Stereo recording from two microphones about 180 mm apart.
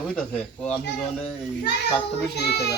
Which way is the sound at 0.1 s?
5° left (ahead or behind).